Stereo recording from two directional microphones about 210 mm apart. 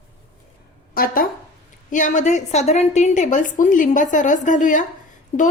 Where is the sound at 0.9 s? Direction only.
45° left (ahead or behind).